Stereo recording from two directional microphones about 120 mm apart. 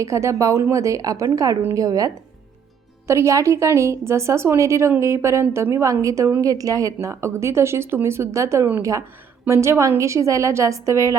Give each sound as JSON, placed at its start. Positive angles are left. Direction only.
{"t": 0.0, "sound": "a woman's voice", "side_deg": -25}